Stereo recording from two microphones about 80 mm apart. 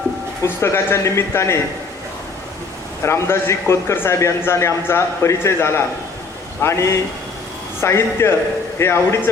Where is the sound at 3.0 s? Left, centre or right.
Left.